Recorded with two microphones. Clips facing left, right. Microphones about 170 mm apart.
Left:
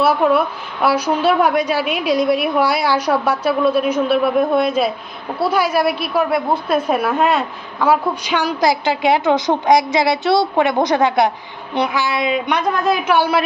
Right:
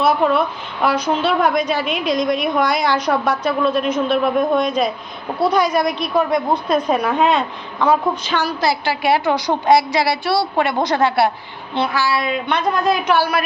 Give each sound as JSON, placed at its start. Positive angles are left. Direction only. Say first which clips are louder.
{"t": 0.0, "sound": "a woman's voice", "louder": "left 1 dB", "side_deg": 10}
{"t": 13.1, "sound": "a woman's voice", "louder": "left 2 dB", "side_deg": 25}